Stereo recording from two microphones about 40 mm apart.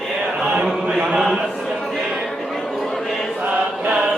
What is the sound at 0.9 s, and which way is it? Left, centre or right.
Chant, centre.